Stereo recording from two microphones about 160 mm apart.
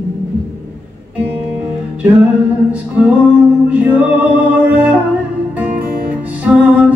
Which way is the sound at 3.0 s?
10° right (ahead or behind).